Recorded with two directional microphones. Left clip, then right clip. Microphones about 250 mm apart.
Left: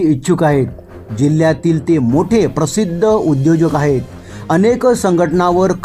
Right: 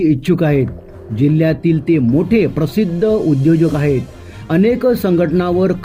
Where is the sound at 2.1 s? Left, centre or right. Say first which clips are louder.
Left 1 dB; centre.